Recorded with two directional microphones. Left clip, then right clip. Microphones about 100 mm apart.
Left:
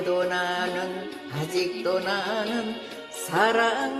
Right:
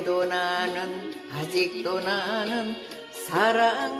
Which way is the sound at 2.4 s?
30° left (ahead or behind).